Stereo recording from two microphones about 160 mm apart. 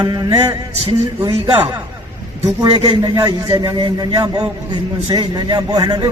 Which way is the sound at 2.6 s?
25° right (ahead or behind).